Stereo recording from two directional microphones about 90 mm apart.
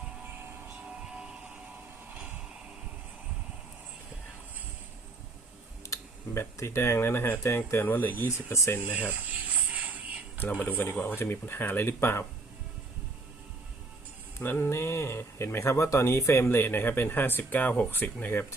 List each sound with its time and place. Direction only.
1.0 s train: 10° right (ahead or behind)
5.8 s speech: 30° left (ahead or behind)
9.0 s a sound: 15° right (ahead or behind)
10.3 s speech: 20° left (ahead or behind)
14.3 s speech: 25° left (ahead or behind)